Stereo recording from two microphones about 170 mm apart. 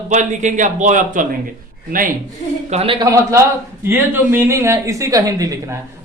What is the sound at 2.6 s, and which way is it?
Speech, 35° right (ahead or behind).